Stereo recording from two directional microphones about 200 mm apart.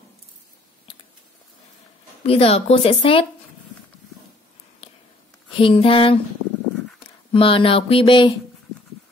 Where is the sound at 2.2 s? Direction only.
30° left (ahead or behind).